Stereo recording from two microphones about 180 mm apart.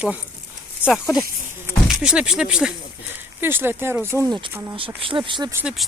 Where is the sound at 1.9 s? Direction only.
5° right (ahead or behind).